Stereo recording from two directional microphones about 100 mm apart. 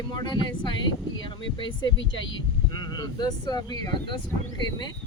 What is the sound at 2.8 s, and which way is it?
Speech, 45° left (ahead or behind).